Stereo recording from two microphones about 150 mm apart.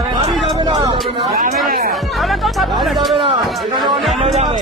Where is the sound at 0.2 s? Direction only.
35° right (ahead or behind).